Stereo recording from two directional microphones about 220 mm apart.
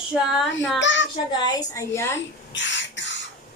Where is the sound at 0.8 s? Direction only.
55° left (ahead or behind).